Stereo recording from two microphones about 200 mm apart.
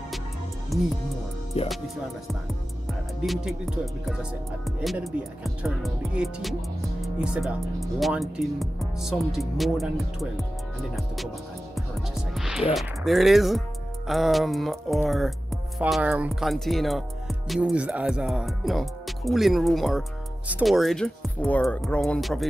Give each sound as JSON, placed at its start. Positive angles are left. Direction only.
{"t": 0.7, "sound": "speech", "side_deg": 0}
{"t": 1.5, "sound": "speech", "side_deg": 30}
{"t": 2.9, "sound": "speech", "side_deg": 0}
{"t": 12.4, "sound": "music", "side_deg": 0}
{"t": 12.7, "sound": "speech", "side_deg": 0}